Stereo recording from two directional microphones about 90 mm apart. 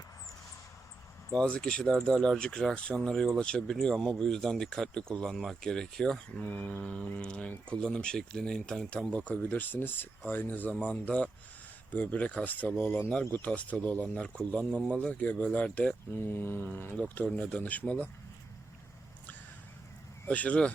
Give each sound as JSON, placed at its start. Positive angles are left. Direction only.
{"t": 1.3, "sound": "speech", "side_deg": 10}
{"t": 6.4, "sound": "speech", "side_deg": 15}
{"t": 9.3, "sound": "speech", "side_deg": 20}
{"t": 14.7, "sound": "speech", "side_deg": -10}
{"t": 14.9, "sound": "speech", "side_deg": 15}
{"t": 16.2, "sound": "speech", "side_deg": 25}
{"t": 20.2, "sound": "speech", "side_deg": 15}